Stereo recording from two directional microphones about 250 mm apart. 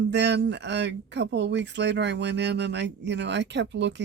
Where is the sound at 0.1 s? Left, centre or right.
Right.